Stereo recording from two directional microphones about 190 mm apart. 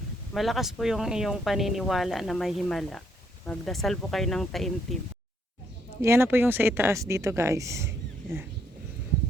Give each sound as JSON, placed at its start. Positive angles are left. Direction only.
{"t": 0.3, "sound": "speech", "side_deg": 0}
{"t": 6.0, "sound": "speech", "side_deg": -15}